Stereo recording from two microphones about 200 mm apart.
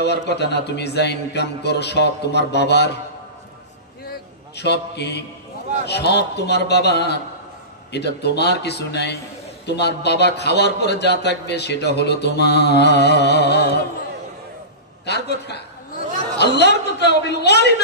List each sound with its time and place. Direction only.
0.0 s a man's voice: 55° left (ahead or behind)
4.1 s a sound: 55° left (ahead or behind)
5.9 s a man's voice: 55° left (ahead or behind)
15.0 s a man's voice: 55° left (ahead or behind)